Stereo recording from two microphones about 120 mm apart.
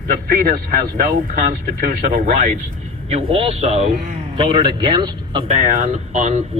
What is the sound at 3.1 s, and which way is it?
Speech, 55° right (ahead or behind).